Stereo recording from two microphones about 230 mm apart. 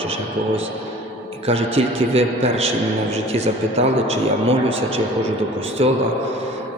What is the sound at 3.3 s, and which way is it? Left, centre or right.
Speech, right.